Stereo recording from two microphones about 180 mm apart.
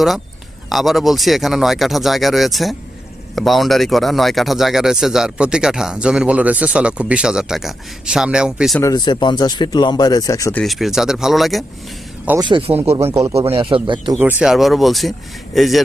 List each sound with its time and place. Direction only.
0.7 s speech: centre (ahead or behind)
8.8 s speech: 20° left (ahead or behind)
10.6 s speech: centre (ahead or behind)
12.4 s speech: 25° right (ahead or behind)
13.0 s speech: 10° right (ahead or behind)
13.2 s speech: 30° right (ahead or behind)
14.2 s speech: 10° right (ahead or behind)